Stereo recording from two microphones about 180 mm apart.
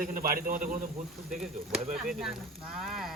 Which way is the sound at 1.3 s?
5° right (ahead or behind).